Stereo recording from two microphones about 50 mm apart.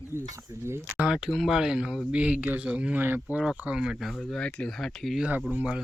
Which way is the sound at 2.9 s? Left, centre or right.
Right.